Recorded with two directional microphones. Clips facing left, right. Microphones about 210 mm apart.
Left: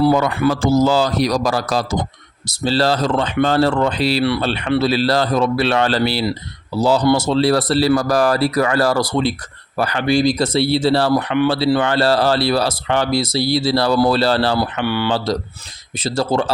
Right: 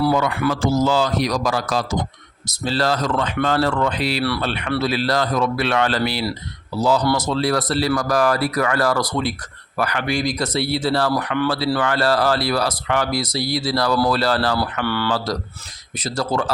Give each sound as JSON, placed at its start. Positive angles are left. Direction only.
{"t": 0.1, "sound": "speech", "side_deg": 40}
{"t": 14.6, "sound": "speech", "side_deg": 15}